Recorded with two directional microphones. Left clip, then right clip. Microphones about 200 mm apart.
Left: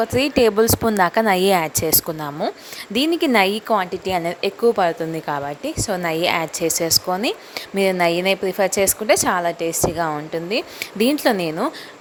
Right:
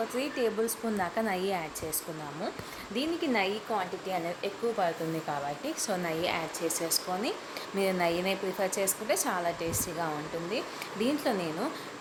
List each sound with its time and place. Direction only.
0.2 s speech: 50° left (ahead or behind)
5.3 s speech: 40° left (ahead or behind)